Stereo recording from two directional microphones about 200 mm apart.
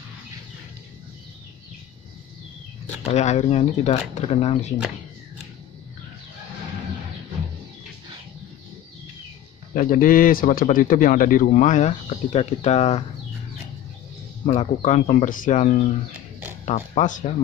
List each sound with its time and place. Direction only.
3.1 s speech: 35° left (ahead or behind)
9.8 s a man's voice: 45° left (ahead or behind)
14.4 s speech: 35° left (ahead or behind)